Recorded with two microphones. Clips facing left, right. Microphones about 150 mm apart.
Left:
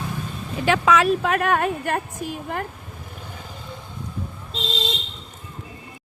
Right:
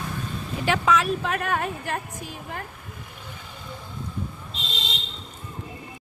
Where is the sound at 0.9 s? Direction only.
80° left.